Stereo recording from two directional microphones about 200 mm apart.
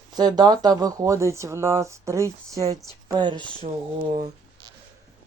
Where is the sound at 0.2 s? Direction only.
20° right (ahead or behind).